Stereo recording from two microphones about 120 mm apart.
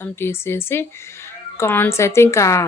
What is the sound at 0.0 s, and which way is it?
Speech, 20° left (ahead or behind).